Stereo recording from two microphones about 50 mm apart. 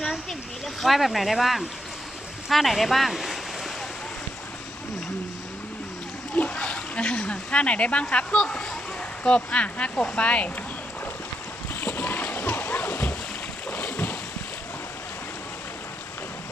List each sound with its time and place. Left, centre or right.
0.0 s speech: centre
6.3 s speech: left
11.7 s splash: left
13.8 s boat: left